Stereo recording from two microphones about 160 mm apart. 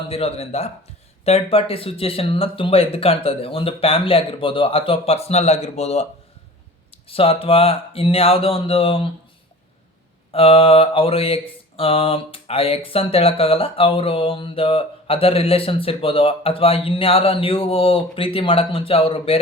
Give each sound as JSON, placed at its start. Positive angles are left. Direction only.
{"t": 0.1, "sound": "mantra", "side_deg": 40}
{"t": 10.3, "sound": "mantra", "side_deg": 35}